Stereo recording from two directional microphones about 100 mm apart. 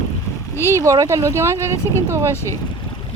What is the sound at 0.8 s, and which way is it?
Speech, 30° right (ahead or behind).